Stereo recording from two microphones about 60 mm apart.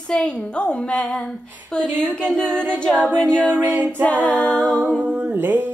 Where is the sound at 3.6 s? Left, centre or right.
Right.